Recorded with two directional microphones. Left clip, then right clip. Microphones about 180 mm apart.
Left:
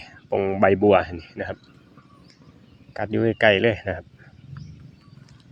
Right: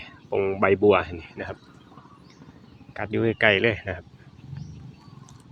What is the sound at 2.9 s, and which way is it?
Speech, 40° left (ahead or behind).